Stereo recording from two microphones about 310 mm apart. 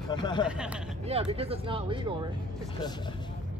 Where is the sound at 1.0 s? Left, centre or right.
Centre.